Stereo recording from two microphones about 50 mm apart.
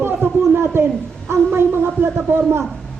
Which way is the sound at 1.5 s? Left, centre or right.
Right.